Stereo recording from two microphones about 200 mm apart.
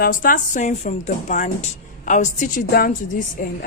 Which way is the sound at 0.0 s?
45° left (ahead or behind).